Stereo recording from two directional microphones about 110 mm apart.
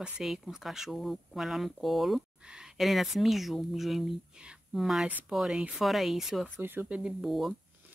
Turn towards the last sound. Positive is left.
turn(degrees=0)  # may be behind; listen again after turning